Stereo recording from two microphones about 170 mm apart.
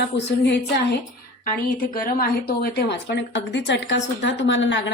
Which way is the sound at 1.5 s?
55° left (ahead or behind).